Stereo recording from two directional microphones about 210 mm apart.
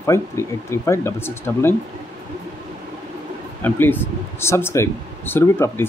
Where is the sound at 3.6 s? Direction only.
10° left (ahead or behind).